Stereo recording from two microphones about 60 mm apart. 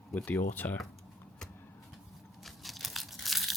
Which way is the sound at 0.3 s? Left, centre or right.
Left.